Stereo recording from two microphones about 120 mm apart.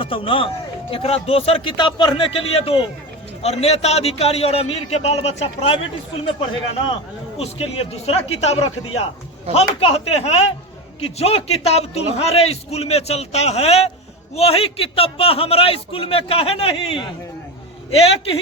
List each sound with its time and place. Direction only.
0.0 s a man's voice: 45° left (ahead or behind)
1.7 s a man's voice: 40° left (ahead or behind); by 5.7 s 65° left (ahead or behind)
7.3 s a man's voice: 55° left (ahead or behind)